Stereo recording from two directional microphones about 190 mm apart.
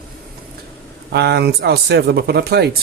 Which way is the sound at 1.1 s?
60° right (ahead or behind).